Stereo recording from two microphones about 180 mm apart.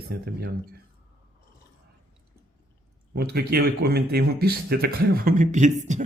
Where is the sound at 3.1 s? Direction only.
60° right (ahead or behind).